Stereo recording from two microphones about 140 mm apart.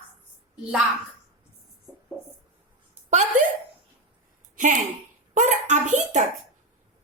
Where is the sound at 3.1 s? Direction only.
55° right (ahead or behind).